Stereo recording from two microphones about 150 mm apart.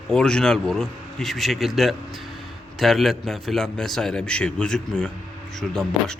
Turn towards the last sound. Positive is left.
turn(degrees=5)  # may be behind; listen again after turning